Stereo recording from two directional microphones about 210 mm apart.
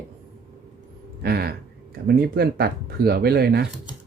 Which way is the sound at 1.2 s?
50° right (ahead or behind).